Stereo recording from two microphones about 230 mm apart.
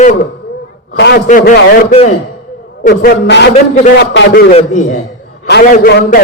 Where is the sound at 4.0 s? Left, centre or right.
Left.